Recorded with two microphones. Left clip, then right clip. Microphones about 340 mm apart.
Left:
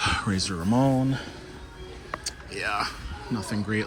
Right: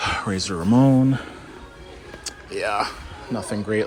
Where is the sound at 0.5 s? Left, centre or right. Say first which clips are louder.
Right 7 dB; right.